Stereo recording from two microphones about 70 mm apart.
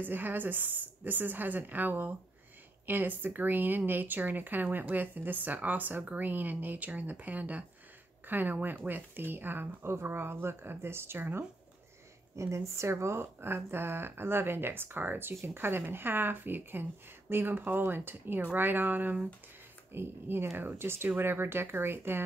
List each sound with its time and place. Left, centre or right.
0.0 s speech: right
12.4 s speech: right